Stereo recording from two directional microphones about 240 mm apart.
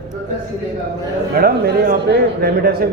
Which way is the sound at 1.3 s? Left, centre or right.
Right.